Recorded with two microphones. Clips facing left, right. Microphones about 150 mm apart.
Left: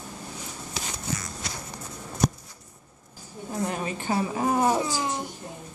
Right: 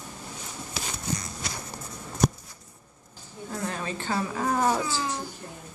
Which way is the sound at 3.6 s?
15° left (ahead or behind).